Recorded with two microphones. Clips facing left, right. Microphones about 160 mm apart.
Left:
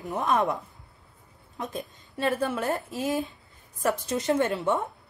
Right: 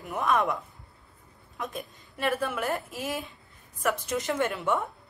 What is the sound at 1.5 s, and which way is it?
A woman's voice, 30° left (ahead or behind).